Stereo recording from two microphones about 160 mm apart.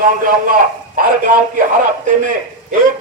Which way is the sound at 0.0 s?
60° right (ahead or behind).